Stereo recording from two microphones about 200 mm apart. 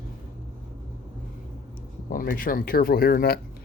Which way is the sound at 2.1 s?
45° left (ahead or behind).